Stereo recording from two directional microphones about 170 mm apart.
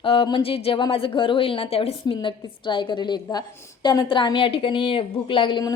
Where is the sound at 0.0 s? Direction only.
30° left (ahead or behind).